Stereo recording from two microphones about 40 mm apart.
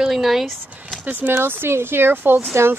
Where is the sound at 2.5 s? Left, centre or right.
Right.